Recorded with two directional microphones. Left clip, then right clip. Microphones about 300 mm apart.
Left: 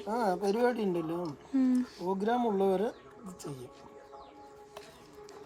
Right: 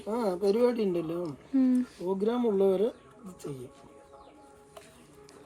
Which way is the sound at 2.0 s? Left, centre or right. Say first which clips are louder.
Right 1 dB; centre.